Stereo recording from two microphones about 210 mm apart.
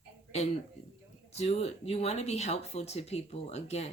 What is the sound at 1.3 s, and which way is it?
Speech, 30° left (ahead or behind).